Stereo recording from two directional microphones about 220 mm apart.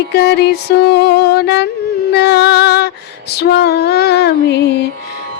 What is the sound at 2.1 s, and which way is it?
Female singing, 50° left (ahead or behind).